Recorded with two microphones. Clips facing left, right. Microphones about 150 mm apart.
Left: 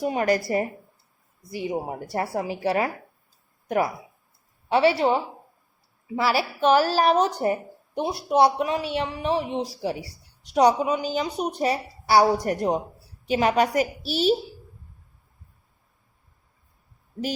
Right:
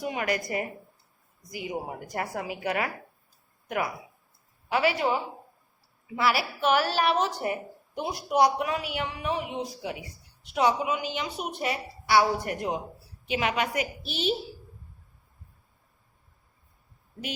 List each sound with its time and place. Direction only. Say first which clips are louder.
0.0 s a woman's voice: left 7 dB; 35° left (ahead or behind)